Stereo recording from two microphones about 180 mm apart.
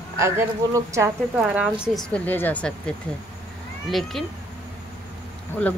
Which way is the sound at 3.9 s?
Centre (ahead or behind).